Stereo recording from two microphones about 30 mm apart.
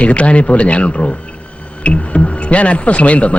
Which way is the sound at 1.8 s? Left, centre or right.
Left.